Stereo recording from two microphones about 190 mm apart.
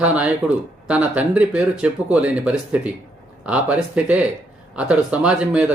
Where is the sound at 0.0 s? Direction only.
5° right (ahead or behind).